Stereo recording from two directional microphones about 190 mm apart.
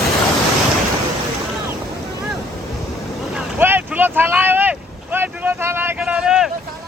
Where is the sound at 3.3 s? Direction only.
10° right (ahead or behind).